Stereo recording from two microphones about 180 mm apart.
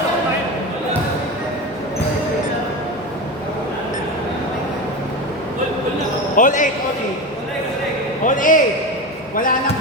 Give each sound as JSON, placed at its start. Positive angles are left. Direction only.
{"t": 6.3, "sound": "speech", "side_deg": 45}
{"t": 8.2, "sound": "a man's voice", "side_deg": 45}